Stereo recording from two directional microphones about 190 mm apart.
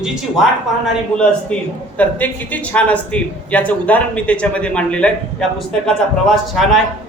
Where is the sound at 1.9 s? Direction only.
10° left (ahead or behind).